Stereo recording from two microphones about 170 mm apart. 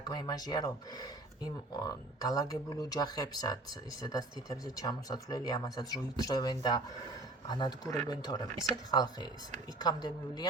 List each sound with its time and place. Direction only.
0.1 s speech: 25° left (ahead or behind)